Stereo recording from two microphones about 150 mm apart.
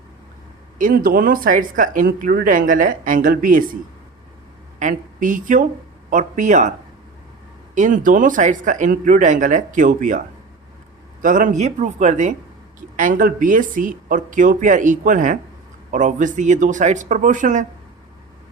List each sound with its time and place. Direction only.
0.8 s speech: 70° right (ahead or behind)
4.8 s speech: 60° right (ahead or behind)
7.8 s speech: 60° right (ahead or behind)
11.2 s speech: 60° right (ahead or behind)
13.0 s speech: 65° right (ahead or behind)